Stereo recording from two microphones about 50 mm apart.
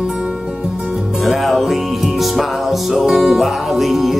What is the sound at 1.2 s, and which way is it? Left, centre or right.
Music, centre.